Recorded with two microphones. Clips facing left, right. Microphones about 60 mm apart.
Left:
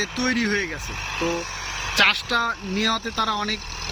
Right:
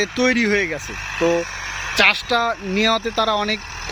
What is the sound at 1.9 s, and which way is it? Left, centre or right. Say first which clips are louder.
Speech: right 3 dB; right.